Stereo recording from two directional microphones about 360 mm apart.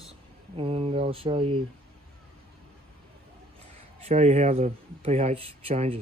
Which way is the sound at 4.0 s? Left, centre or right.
Centre.